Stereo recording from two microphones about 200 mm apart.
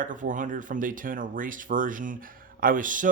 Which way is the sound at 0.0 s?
40° right (ahead or behind).